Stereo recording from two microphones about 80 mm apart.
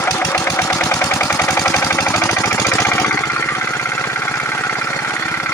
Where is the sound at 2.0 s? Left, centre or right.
Left.